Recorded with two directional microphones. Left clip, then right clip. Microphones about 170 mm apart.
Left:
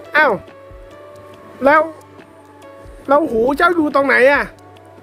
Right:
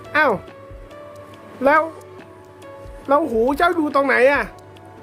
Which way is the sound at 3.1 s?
15° left (ahead or behind).